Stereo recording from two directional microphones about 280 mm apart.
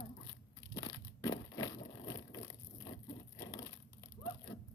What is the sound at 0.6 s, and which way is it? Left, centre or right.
Crushing, centre.